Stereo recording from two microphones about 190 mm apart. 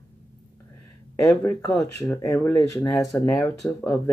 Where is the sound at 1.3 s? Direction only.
15° left (ahead or behind).